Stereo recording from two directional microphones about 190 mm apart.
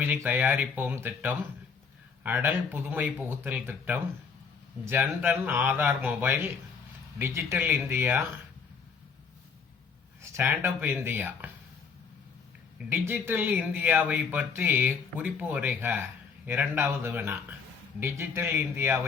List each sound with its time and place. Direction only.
0.0 s speech: 10° right (ahead or behind)
10.2 s speech: 15° right (ahead or behind)
12.9 s speech: 10° right (ahead or behind)